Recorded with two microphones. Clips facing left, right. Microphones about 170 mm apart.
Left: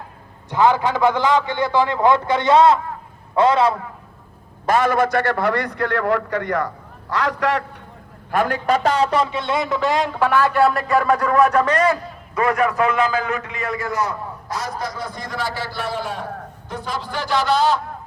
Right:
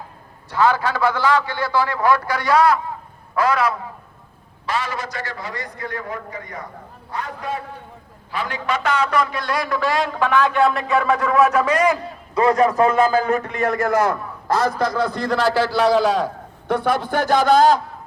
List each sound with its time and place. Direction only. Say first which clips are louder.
0.5 s a man's voice: left 2 dB; 20° left (ahead or behind)
4.6 s a man's voice: left 8 dB; 50° left (ahead or behind); by 6.7 s 75° left (ahead or behind)
7.1 s a man's voice: left 7 dB; 90° left
8.3 s a man's voice: left 6 dB; 50° left (ahead or behind); by 11.9 s 10° right (ahead or behind)
12.4 s a man's voice: right 3 dB; 35° right (ahead or behind)
13.7 s a man's voice: right 5 dB; 50° right (ahead or behind)
15.4 s a man's voice: right 9 dB; 90° right; by 17.7 s 45° right (ahead or behind)